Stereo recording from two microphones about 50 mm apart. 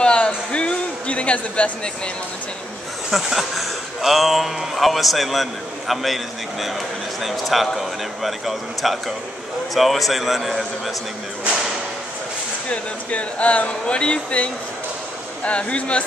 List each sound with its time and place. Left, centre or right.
0.0 s a sound: left
3.1 s speech: centre
12.6 s speech: left